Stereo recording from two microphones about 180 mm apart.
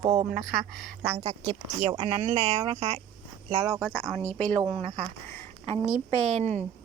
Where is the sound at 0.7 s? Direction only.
5° left (ahead or behind).